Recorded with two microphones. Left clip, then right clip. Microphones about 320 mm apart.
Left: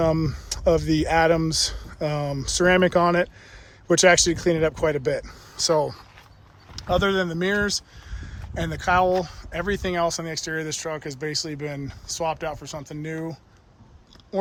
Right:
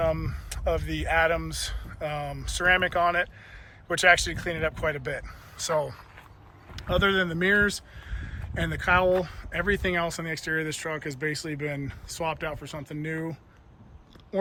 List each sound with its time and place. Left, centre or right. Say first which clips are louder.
0.0 s speech: left 5 dB; centre